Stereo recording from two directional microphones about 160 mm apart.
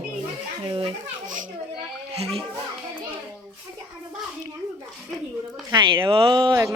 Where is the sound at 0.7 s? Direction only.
35° right (ahead or behind).